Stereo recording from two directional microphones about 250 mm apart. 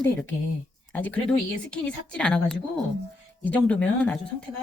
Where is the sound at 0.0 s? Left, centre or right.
Centre.